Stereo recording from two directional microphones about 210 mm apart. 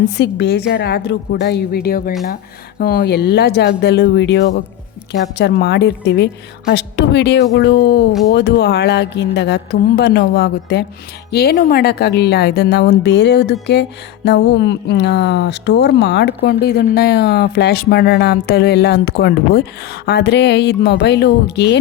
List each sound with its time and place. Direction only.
0.2 s speech: 55° left (ahead or behind)